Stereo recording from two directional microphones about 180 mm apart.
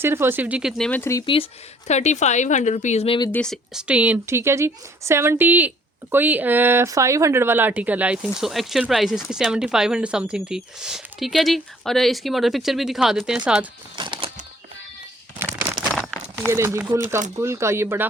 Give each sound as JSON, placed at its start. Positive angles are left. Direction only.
{"t": 0.0, "sound": "speech", "side_deg": -15}
{"t": 0.8, "sound": "speech", "side_deg": 10}
{"t": 1.2, "sound": "speech", "side_deg": 30}
{"t": 3.3, "sound": "a woman's voice", "side_deg": 5}
{"t": 13.9, "sound": "a sound", "side_deg": -25}
{"t": 15.6, "sound": "a sound", "side_deg": -20}
{"t": 16.5, "sound": "speech", "side_deg": -15}